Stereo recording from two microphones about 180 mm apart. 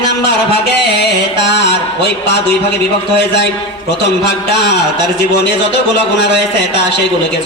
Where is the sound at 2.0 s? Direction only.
70° left (ahead or behind).